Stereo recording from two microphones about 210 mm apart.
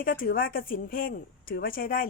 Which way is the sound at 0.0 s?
45° left (ahead or behind).